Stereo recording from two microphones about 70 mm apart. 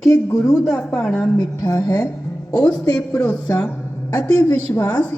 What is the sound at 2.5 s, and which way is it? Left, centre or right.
Speech, left.